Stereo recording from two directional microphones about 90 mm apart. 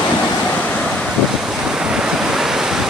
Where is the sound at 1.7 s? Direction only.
10° right (ahead or behind).